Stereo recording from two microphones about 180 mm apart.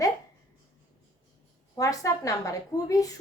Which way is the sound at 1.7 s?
20° left (ahead or behind).